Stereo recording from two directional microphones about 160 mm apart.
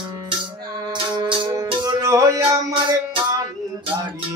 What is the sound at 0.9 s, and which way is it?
Music, 30° right (ahead or behind).